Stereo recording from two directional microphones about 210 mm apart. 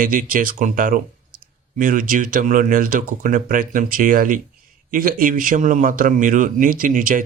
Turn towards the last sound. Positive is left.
turn(degrees=-40)  # may be behind; listen again after turning